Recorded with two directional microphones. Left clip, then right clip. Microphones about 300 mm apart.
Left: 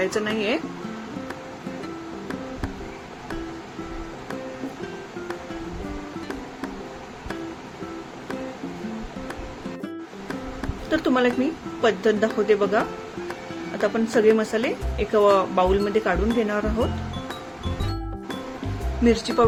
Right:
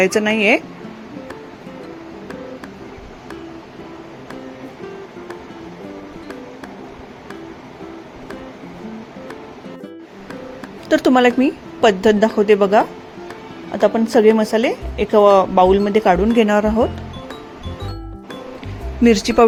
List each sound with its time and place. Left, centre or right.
0.0 s speech: right
10.8 s speech: right
13.8 s speech: centre
19.0 s speech: right